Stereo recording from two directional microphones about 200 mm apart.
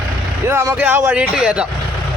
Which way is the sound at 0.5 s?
10° right (ahead or behind).